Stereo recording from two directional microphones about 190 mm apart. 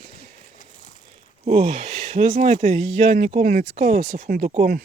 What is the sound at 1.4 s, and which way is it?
Speech, 35° right (ahead or behind).